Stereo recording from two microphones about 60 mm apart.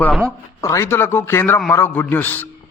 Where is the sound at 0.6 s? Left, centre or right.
Left.